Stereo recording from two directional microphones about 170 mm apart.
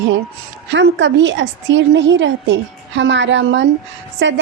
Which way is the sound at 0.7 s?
90° right.